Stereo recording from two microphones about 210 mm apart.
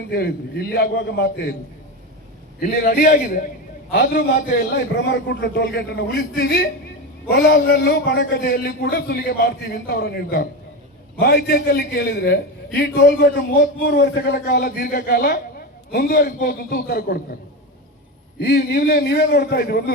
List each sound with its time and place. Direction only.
0.1 s a man's voice: 50° left (ahead or behind)
2.6 s a man's voice: 40° left (ahead or behind)
4.9 s a man's voice: 55° left (ahead or behind)
18.3 s a man's voice: 50° left (ahead or behind)